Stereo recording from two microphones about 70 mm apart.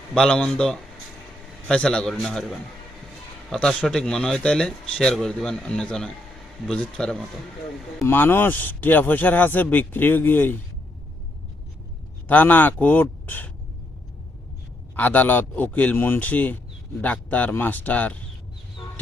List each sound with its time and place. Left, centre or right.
0.1 s a man's voice: centre
2.1 s a man's voice: centre
8.0 s speech: left
12.3 s speech: left
14.9 s speech: left